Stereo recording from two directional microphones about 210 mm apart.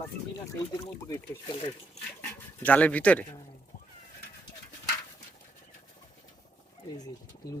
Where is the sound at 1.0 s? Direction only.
15° left (ahead or behind).